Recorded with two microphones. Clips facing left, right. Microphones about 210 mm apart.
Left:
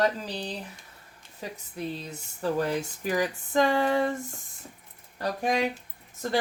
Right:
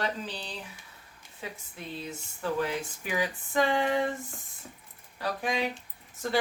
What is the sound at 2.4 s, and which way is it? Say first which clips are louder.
Speech: left 3 dB; 40° left (ahead or behind).